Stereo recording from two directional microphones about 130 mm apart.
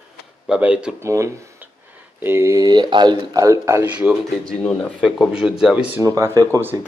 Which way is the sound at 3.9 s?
10° right (ahead or behind).